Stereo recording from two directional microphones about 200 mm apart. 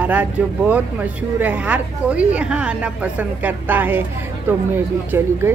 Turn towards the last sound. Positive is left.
turn(degrees=-10)  # may be behind; listen again after turning